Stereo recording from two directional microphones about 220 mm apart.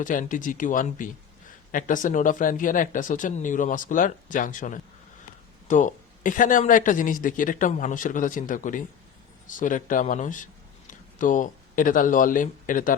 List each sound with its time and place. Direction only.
0.0 s speech: 35° left (ahead or behind)